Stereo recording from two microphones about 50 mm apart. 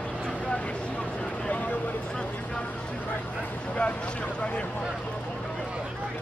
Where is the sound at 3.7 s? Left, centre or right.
Left.